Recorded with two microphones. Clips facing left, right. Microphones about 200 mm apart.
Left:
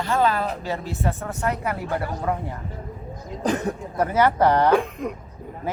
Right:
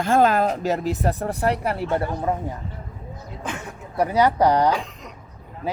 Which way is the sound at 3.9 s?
15° right (ahead or behind).